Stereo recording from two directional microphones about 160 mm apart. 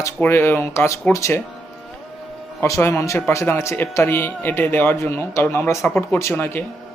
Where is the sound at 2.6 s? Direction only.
15° left (ahead or behind).